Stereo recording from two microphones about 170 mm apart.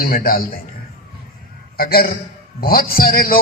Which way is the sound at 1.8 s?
60° left (ahead or behind).